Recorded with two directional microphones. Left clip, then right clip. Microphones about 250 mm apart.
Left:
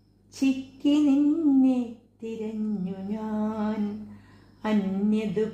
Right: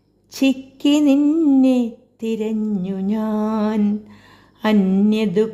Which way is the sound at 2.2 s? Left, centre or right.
Right.